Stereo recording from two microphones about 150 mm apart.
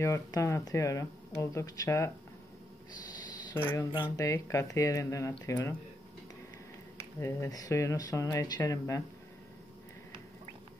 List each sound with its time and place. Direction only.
0.0 s speech: 20° left (ahead or behind)
4.0 s speech: 20° left (ahead or behind)
7.2 s speech: 20° left (ahead or behind)